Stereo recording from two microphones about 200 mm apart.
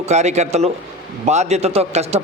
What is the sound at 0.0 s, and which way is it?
A man's voice, 35° right (ahead or behind).